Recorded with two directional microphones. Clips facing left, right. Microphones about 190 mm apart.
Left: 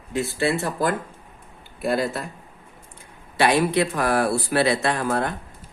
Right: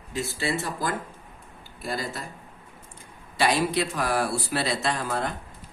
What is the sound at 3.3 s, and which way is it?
Speech, 60° left (ahead or behind).